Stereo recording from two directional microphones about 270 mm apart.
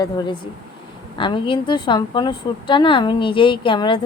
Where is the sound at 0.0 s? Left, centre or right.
Centre.